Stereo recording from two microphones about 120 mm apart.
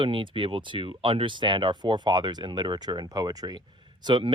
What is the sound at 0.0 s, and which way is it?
Speech, 45° right (ahead or behind).